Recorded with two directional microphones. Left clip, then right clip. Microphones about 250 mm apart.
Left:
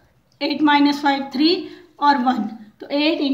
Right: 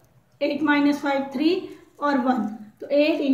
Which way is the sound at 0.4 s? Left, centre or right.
Left.